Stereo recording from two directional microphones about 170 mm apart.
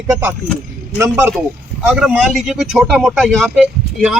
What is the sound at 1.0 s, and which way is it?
Speech, 15° right (ahead or behind).